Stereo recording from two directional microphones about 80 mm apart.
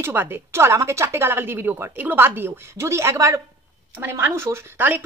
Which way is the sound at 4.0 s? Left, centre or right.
Right.